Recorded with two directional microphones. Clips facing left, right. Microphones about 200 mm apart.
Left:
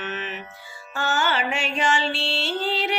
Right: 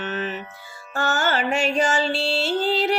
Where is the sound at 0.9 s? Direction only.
45° right (ahead or behind).